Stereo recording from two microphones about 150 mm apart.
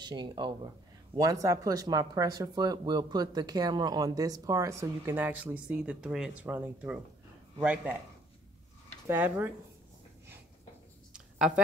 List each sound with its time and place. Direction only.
0.0 s speech: 30° right (ahead or behind); by 7.9 s 10° right (ahead or behind)
9.0 s speech: 15° right (ahead or behind)
11.1 s a sound: 5° right (ahead or behind)